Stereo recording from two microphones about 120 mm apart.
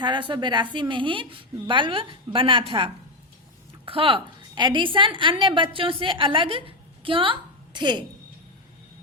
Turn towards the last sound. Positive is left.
turn(degrees=-40)  # may be behind; listen again after turning